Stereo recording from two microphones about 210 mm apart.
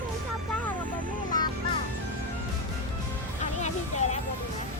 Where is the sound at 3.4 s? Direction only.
35° left (ahead or behind).